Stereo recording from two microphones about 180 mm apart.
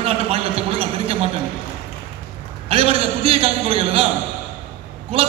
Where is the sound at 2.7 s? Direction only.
30° right (ahead or behind).